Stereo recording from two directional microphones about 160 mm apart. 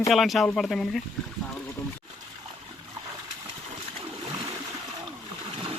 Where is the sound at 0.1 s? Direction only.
Centre (ahead or behind).